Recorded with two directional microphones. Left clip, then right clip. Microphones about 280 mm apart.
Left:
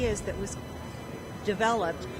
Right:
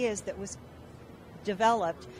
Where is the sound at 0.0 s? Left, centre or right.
Right.